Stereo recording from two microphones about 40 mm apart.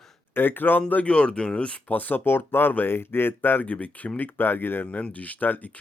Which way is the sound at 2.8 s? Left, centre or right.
Left.